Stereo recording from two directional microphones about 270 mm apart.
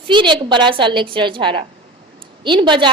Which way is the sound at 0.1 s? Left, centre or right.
Centre.